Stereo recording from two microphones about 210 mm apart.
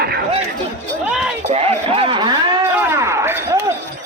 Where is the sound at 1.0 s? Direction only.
5° right (ahead or behind).